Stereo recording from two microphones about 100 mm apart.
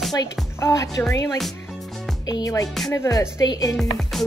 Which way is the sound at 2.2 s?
40° left (ahead or behind).